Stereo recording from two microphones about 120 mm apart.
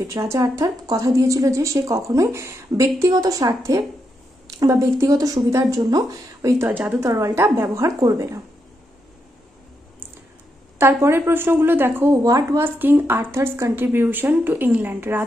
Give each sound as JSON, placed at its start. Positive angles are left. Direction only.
{"t": 0.0, "sound": "a woman's voice", "side_deg": -25}
{"t": 6.7, "sound": "a woman's voice", "side_deg": -15}
{"t": 7.1, "sound": "a woman's voice", "side_deg": -30}
{"t": 10.8, "sound": "a woman's voice", "side_deg": -20}